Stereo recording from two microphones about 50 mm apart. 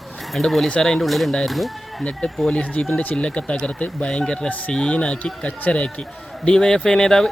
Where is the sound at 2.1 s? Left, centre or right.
Centre.